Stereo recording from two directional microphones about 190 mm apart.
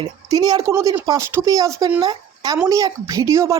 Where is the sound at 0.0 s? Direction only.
20° right (ahead or behind).